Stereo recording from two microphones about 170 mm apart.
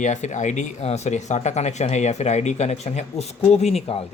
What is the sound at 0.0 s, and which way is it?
Speech, 45° left (ahead or behind).